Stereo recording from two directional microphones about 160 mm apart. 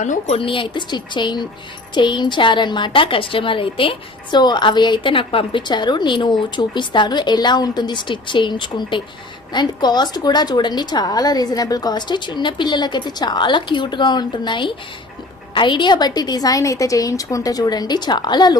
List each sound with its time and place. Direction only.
0.0 s a woman's voice: 45° left (ahead or behind); by 18.5 s 25° left (ahead or behind)